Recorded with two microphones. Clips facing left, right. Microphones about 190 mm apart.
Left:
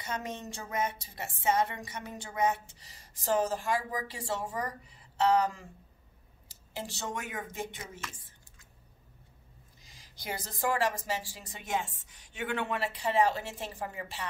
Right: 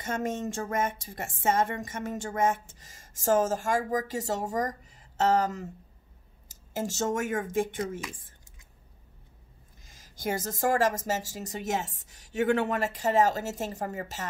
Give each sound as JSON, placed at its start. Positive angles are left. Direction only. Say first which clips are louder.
{"t": 0.0, "sound": "a woman's voice", "louder": "right 7 dB", "side_deg": -50}
{"t": 9.8, "sound": "a woman's voice", "louder": "right 8 dB", "side_deg": -45}